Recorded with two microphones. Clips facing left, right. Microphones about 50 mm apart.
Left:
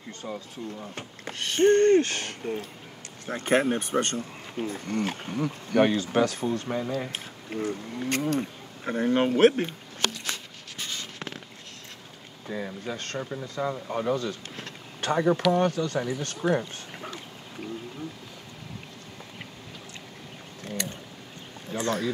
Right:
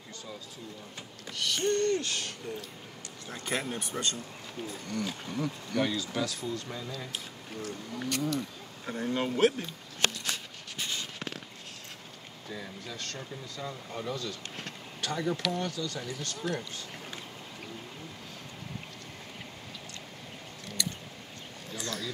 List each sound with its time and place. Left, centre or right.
0.2 s speech: left
7.6 s speech: left
8.1 s speech: left
12.4 s speech: left
20.6 s a sound: left
21.6 s speech: left